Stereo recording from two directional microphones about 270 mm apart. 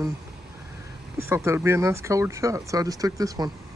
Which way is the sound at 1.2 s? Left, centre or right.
Centre.